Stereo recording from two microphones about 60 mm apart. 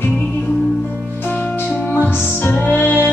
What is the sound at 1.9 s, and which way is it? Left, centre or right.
Music, left.